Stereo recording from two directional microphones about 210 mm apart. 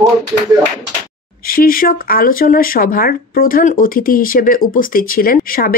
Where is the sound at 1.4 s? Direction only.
45° left (ahead or behind).